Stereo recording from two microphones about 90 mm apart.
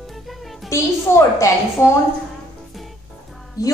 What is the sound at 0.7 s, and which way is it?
A woman's voice, 35° left (ahead or behind).